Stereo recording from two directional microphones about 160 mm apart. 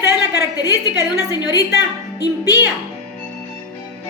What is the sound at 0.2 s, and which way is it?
A woman's voice, 25° left (ahead or behind).